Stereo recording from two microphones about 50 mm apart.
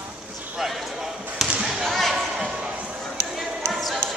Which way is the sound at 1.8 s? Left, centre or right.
Centre.